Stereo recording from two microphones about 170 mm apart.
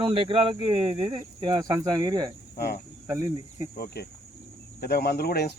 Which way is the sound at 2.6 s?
65° left (ahead or behind).